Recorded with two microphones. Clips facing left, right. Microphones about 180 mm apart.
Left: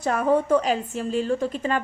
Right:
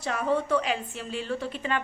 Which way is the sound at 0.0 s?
50° left (ahead or behind).